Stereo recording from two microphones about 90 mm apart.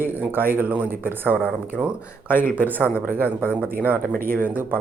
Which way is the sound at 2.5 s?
20° right (ahead or behind).